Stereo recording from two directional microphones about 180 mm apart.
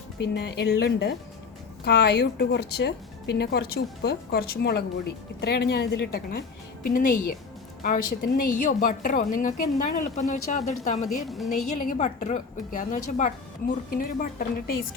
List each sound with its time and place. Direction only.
0.2 s a woman's voice: 70° left (ahead or behind); by 11.0 s 40° left (ahead or behind)
11.3 s a woman's voice: centre (ahead or behind)
11.8 s a woman's voice: 45° left (ahead or behind)